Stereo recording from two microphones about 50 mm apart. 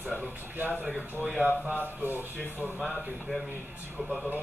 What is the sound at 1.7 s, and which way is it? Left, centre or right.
A man's voice, right.